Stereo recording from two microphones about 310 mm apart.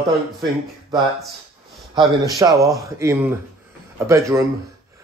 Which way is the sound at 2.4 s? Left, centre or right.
Centre.